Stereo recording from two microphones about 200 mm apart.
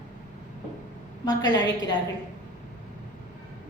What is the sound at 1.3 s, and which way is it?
Speech, 20° left (ahead or behind).